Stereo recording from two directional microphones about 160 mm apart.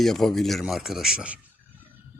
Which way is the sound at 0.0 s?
Centre (ahead or behind).